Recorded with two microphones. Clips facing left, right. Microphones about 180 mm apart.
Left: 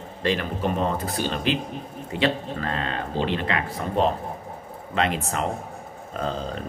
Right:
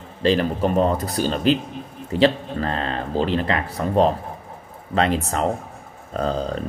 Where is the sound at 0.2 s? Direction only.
35° right (ahead or behind).